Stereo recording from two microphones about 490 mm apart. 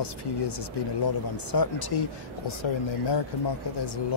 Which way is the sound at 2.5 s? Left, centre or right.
Left.